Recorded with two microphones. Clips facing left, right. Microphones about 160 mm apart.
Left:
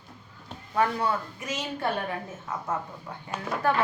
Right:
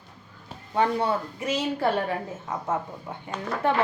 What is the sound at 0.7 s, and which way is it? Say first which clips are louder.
Speech: right 2 dB; 30° right (ahead or behind).